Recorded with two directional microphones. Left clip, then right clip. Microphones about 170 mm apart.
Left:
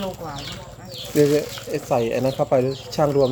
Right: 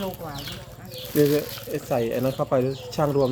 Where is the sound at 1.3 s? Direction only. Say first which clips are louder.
Left 3 dB; 5° left (ahead or behind).